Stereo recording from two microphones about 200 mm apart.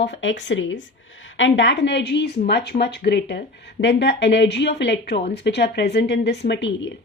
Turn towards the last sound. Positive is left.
turn(degrees=60)  # may be behind; listen again after turning